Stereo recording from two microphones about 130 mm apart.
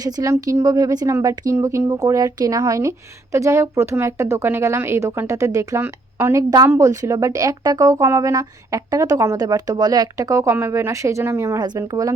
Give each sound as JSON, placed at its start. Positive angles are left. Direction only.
{"t": 0.0, "sound": "speech", "side_deg": -30}